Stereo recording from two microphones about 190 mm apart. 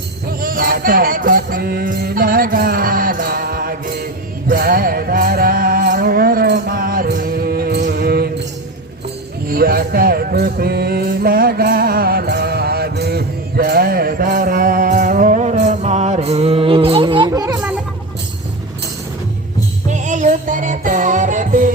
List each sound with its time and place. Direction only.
0.3 s music: 50° right (ahead or behind)
9.5 s music: 50° right (ahead or behind); by 17.6 s 20° right (ahead or behind)
19.9 s music: 40° right (ahead or behind)